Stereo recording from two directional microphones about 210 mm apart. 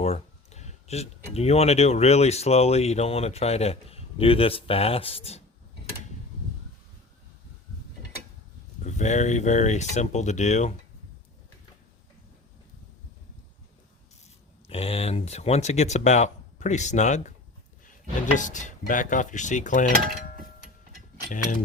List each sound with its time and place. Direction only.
0.0 s speech: 30° left (ahead or behind)
8.8 s speech: 35° left (ahead or behind)
14.7 s speech: 30° left (ahead or behind)
18.3 s speech: 35° left (ahead or behind)
21.2 s speech: 40° left (ahead or behind)